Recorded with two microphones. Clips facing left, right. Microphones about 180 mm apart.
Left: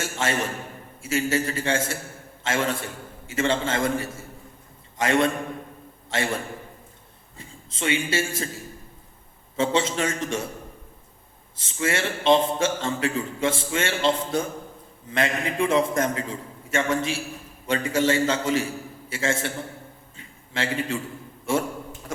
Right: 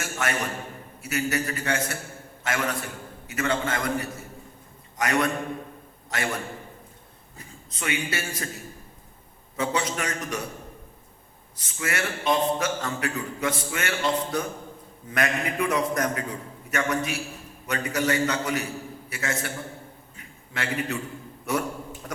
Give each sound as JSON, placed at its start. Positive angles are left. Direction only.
{"t": 0.0, "sound": "a man's voice", "side_deg": 25}
{"t": 9.6, "sound": "a man's voice", "side_deg": 25}
{"t": 11.5, "sound": "a man's voice", "side_deg": 25}
{"t": 20.1, "sound": "a sound", "side_deg": 25}
{"t": 21.5, "sound": "a man's voice", "side_deg": 25}